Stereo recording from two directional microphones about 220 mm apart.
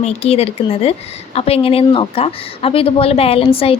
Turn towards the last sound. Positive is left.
turn(degrees=25)  # may be behind; listen again after turning